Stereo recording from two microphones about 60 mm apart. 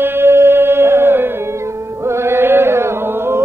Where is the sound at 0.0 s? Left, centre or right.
Right.